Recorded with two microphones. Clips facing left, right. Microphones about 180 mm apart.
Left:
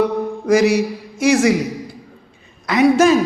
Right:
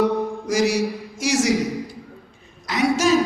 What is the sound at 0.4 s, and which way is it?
A man's voice, 60° left (ahead or behind).